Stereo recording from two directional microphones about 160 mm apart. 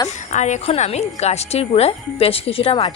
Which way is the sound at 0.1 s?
50° left (ahead or behind).